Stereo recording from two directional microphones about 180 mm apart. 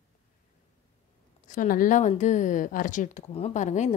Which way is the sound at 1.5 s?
50° left (ahead or behind).